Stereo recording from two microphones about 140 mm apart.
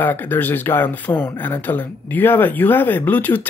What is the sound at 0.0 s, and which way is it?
Speech, 15° left (ahead or behind).